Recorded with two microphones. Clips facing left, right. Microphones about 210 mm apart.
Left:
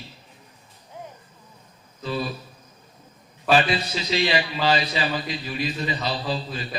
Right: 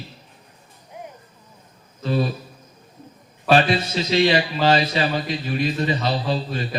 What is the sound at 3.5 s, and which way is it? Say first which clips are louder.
A man's voice: right 3 dB; 45° right (ahead or behind).